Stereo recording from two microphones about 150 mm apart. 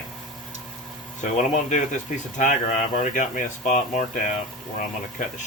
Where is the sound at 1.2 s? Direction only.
55° left (ahead or behind).